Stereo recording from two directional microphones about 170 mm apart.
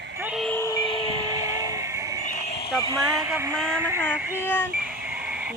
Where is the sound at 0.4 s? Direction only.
15° left (ahead or behind); by 1.1 s 30° left (ahead or behind).